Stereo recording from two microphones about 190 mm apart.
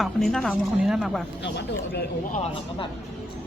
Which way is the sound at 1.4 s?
60° left (ahead or behind).